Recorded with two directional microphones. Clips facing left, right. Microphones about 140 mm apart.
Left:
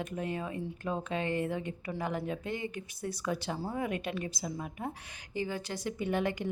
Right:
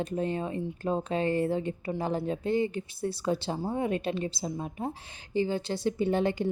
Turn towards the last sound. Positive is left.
turn(degrees=-30)  # may be behind; listen again after turning